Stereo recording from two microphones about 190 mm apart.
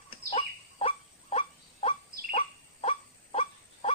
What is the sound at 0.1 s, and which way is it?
Bird, 30° left (ahead or behind).